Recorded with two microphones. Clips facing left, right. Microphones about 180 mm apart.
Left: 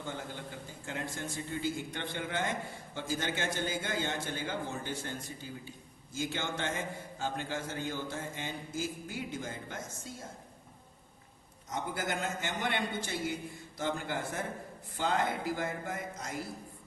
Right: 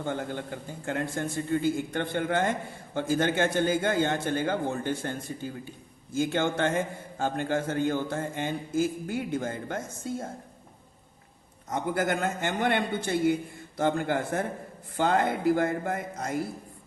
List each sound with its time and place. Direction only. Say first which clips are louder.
0.0 s a man's voice: right 9 dB; 55° right (ahead or behind)
11.7 s a man's voice: right 8 dB; 55° right (ahead or behind)